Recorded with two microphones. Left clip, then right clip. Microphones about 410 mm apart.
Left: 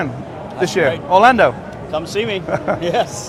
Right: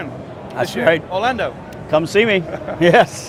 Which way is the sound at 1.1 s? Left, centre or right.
Left.